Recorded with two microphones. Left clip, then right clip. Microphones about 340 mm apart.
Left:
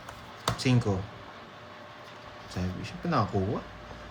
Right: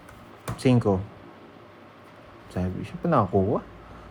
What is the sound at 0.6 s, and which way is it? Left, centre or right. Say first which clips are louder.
Speech: right 9 dB; centre.